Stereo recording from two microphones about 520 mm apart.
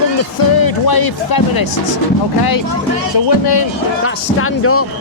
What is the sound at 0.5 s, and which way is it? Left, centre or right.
Speech, left.